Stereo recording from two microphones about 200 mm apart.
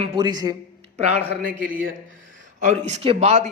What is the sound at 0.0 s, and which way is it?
Speech, 25° right (ahead or behind).